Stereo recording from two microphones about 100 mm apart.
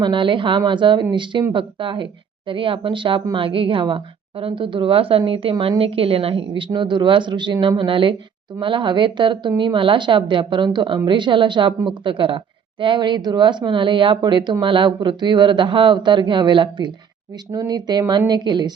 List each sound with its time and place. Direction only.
0.0 s a woman's voice: 55° right (ahead or behind)
17.5 s speech: 35° right (ahead or behind)